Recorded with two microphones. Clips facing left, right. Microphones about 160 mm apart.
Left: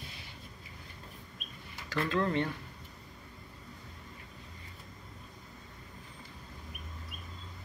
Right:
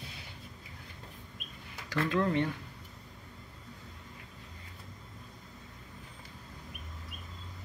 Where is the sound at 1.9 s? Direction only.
15° right (ahead or behind).